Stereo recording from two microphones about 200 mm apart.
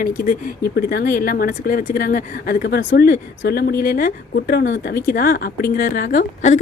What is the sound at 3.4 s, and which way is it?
A woman's voice, 50° left (ahead or behind).